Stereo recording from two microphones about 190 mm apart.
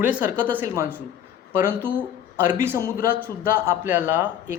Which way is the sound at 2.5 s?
10° right (ahead or behind).